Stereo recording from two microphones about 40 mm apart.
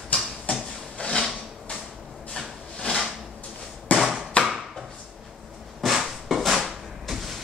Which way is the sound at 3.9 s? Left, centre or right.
Left.